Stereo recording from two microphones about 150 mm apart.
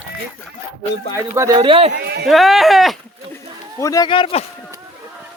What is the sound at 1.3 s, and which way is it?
Speech, 20° right (ahead or behind).